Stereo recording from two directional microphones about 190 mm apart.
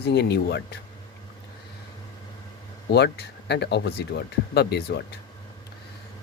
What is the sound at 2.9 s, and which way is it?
Speech, 60° left (ahead or behind).